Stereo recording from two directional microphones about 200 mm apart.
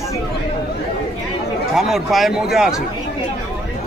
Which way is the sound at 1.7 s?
Centre (ahead or behind).